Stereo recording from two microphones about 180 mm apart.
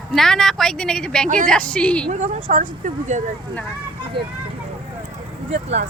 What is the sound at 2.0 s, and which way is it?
Speech, 40° right (ahead or behind).